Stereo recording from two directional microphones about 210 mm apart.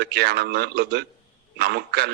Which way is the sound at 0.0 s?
50° right (ahead or behind).